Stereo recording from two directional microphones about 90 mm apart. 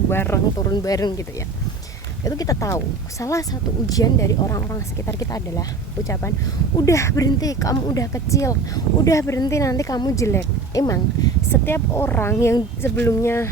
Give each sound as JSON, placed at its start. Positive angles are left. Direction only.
{"t": 0.1, "sound": "speech", "side_deg": 25}
{"t": 0.6, "sound": "speech", "side_deg": 40}
{"t": 2.2, "sound": "speech", "side_deg": 40}
{"t": 6.8, "sound": "speech", "side_deg": 35}
{"t": 11.5, "sound": "speech", "side_deg": 25}